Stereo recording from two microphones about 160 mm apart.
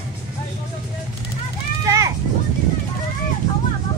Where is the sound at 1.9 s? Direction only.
20° right (ahead or behind).